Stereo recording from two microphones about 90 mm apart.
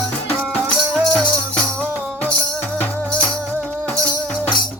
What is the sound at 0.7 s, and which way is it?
Music, 10° left (ahead or behind).